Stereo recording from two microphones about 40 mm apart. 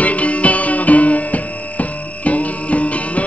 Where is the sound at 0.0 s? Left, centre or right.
Left.